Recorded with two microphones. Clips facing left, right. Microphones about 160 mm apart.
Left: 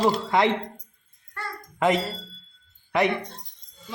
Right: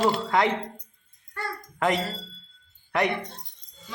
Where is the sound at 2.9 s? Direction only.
Centre (ahead or behind).